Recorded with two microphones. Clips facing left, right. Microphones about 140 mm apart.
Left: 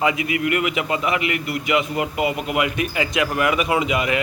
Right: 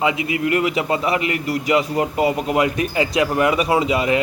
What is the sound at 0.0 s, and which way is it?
A man's voice, 25° right (ahead or behind).